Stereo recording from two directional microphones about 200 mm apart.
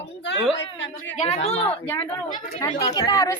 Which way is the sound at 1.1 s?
30° left (ahead or behind).